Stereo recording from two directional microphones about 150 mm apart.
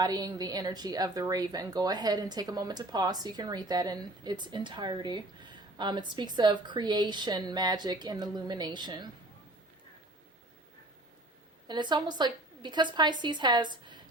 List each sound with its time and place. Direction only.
0.0 s speech: 25° right (ahead or behind)
11.7 s speech: 30° right (ahead or behind)